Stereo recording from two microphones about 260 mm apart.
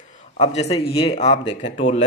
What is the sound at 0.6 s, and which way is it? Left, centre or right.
Speech, left.